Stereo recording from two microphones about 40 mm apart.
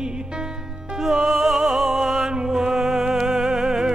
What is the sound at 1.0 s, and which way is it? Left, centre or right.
Music, centre.